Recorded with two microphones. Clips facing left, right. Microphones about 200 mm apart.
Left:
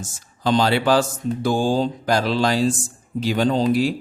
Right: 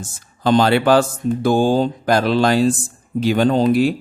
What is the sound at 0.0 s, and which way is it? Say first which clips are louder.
Speech: right 3 dB; 55° right (ahead or behind).